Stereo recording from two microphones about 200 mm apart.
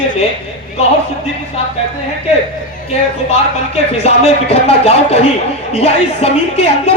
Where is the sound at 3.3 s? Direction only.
30° left (ahead or behind).